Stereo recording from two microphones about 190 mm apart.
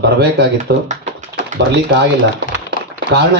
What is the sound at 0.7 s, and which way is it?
A man's voice, 60° right (ahead or behind).